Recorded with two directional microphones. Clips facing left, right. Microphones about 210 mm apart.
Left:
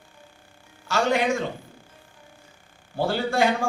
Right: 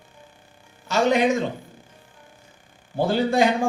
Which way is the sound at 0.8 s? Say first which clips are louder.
Right 3 dB; 20° right (ahead or behind).